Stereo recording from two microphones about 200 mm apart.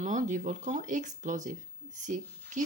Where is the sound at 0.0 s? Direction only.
40° right (ahead or behind).